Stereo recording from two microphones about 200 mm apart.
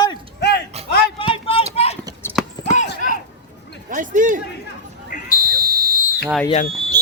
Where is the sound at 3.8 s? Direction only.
40° right (ahead or behind).